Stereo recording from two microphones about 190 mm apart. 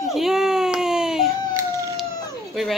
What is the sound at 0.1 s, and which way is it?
Baby cry, centre (ahead or behind).